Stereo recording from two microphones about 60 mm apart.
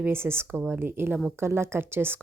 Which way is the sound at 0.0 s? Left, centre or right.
Right.